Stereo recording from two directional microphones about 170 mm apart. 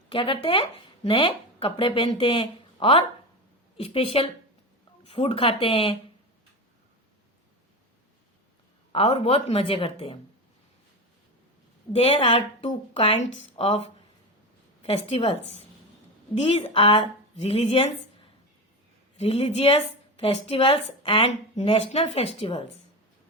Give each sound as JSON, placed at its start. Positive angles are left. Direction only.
{"t": 0.1, "sound": "a woman's voice", "side_deg": 30}
{"t": 8.9, "sound": "a woman's voice", "side_deg": 35}
{"t": 11.9, "sound": "a woman's voice", "side_deg": 35}